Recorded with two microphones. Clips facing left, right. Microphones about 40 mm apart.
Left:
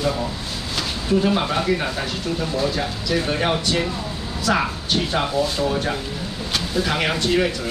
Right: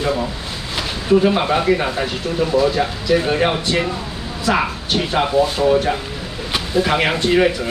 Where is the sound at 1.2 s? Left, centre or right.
Right.